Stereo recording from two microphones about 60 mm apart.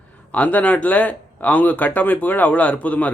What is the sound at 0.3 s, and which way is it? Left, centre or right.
Speech, left.